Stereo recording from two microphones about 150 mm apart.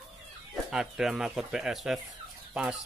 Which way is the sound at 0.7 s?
5° right (ahead or behind).